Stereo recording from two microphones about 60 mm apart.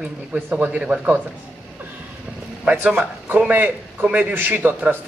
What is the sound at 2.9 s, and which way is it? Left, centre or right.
A man's voice, right.